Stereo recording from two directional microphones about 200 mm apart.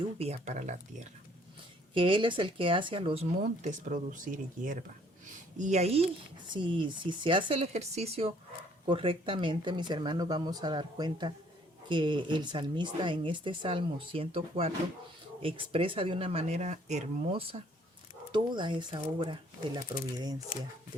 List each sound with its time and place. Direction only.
0.2 s speech: 35° right (ahead or behind)
1.9 s speech: 25° right (ahead or behind)